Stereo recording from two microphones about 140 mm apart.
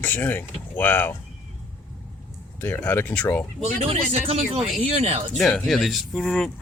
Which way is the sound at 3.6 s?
45° right (ahead or behind).